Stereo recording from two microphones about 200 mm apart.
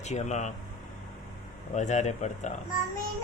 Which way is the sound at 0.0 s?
35° left (ahead or behind).